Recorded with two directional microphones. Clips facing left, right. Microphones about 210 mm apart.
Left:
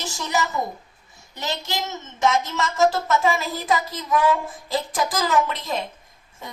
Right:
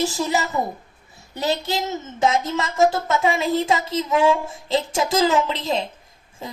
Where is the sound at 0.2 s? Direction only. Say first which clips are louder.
Right 3 dB; 35° right (ahead or behind).